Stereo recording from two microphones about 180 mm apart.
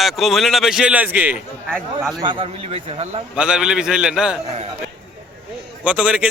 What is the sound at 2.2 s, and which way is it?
Speech, 30° right (ahead or behind).